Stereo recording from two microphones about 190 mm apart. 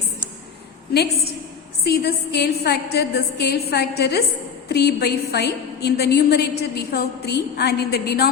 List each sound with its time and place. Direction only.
1.8 s a woman's voice: 55° left (ahead or behind)